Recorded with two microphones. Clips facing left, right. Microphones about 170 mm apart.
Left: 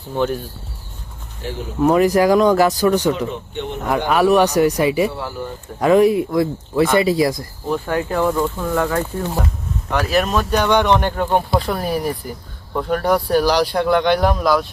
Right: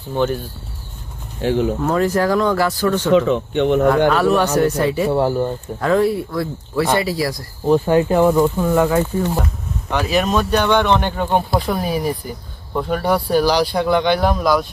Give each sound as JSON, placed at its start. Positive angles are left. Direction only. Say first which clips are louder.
{"t": 0.2, "sound": "speech", "louder": "right 1 dB", "side_deg": 5}
{"t": 1.4, "sound": "speech", "louder": "right 10 dB", "side_deg": -90}
{"t": 1.8, "sound": "speech", "louder": "left 3 dB", "side_deg": 15}
{"t": 3.1, "sound": "speech", "louder": "right 6 dB", "side_deg": -90}
{"t": 4.1, "sound": "speech", "louder": "left 2 dB", "side_deg": 15}
{"t": 5.0, "sound": "speech", "louder": "right 7 dB", "side_deg": -40}
{"t": 5.8, "sound": "speech", "louder": "left 4 dB", "side_deg": 15}
{"t": 7.7, "sound": "speech", "louder": "right 6 dB", "side_deg": -20}
{"t": 11.1, "sound": "speech", "louder": "even", "side_deg": 0}